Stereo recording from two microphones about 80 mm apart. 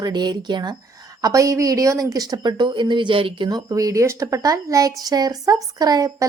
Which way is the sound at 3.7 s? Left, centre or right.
Right.